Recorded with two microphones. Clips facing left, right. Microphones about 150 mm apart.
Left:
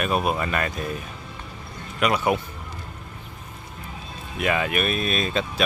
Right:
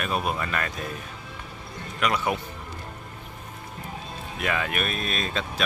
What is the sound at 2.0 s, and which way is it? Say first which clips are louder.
Speech: left 4 dB; 15° left (ahead or behind).